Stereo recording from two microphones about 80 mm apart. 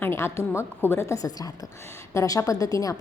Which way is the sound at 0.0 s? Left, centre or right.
Left.